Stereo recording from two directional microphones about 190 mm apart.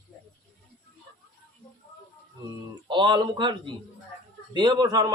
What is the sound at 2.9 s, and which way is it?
Speech, 25° right (ahead or behind).